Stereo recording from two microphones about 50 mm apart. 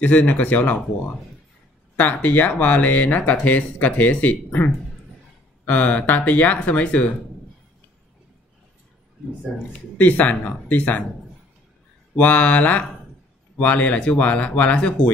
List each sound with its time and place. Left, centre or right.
0.0 s speech: left
2.0 s speech: left
9.7 s speech: left
12.2 s speech: left